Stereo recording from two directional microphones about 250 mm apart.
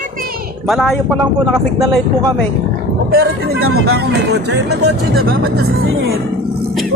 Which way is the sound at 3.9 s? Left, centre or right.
Right.